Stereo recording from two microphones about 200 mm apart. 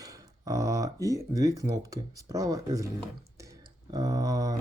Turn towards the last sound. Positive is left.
turn(degrees=-20)  # may be behind; listen again after turning